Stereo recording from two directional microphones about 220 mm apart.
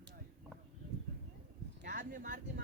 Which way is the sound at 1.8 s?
40° right (ahead or behind).